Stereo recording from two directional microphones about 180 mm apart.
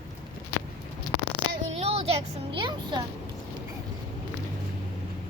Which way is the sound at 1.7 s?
35° right (ahead or behind).